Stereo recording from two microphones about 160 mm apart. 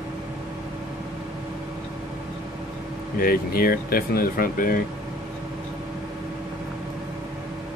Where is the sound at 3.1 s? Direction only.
65° left (ahead or behind).